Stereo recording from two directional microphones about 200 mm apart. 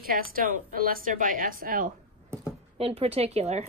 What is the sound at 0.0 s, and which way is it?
A woman's voice, 45° right (ahead or behind).